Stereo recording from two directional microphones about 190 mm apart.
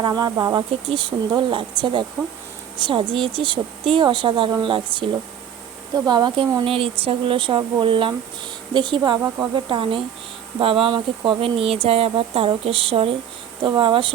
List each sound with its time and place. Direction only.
0.0 s speech: 20° right (ahead or behind)